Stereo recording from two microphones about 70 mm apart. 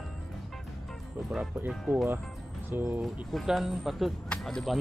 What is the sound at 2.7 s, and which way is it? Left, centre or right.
Speech, right.